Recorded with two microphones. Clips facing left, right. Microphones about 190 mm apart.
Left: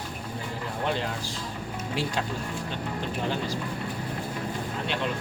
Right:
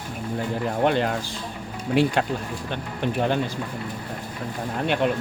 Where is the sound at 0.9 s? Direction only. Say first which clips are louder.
Right 5 dB; 60° right (ahead or behind).